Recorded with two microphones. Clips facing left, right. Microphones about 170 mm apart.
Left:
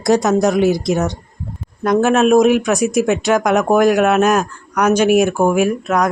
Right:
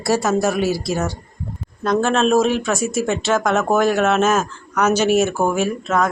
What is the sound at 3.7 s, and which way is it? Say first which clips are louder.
Speech: left 5 dB; centre (ahead or behind).